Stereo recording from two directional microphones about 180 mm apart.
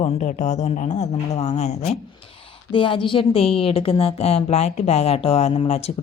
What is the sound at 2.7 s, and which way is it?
A woman's voice, 25° left (ahead or behind).